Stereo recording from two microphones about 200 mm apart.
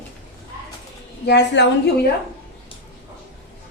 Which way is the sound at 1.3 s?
60° left (ahead or behind).